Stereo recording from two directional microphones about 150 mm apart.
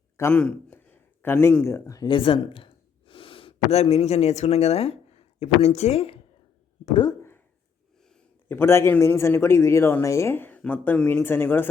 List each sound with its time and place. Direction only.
0.2 s speech: 10° left (ahead or behind)
2.0 s speech: 35° left (ahead or behind)
6.9 s speech: 30° left (ahead or behind)
7.2 s a sound: 15° left (ahead or behind)
8.1 s a man's voice: 15° left (ahead or behind)